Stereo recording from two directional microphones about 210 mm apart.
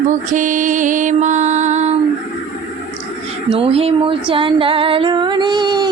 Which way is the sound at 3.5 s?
30° right (ahead or behind).